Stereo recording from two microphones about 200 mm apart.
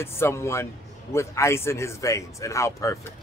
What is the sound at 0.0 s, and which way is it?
A man's voice, 10° left (ahead or behind).